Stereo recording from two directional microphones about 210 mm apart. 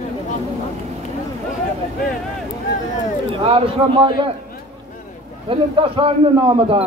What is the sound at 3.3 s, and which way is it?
A man's voice, 25° right (ahead or behind).